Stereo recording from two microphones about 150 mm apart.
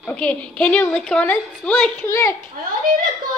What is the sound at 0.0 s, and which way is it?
A woman's voice, 5° left (ahead or behind).